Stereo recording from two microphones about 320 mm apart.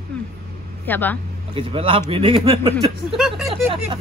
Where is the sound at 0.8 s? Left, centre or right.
Centre.